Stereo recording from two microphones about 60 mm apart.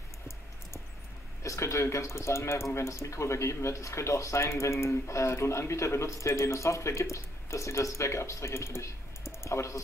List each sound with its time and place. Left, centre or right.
1.4 s speech: left